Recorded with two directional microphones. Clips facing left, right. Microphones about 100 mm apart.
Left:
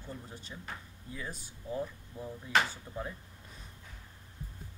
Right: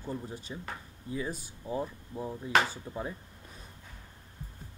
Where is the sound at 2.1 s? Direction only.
30° right (ahead or behind).